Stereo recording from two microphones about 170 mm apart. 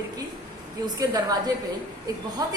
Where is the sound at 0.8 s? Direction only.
25° right (ahead or behind).